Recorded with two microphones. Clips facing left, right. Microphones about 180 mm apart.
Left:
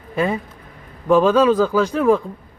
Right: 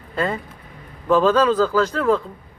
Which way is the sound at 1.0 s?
10° left (ahead or behind).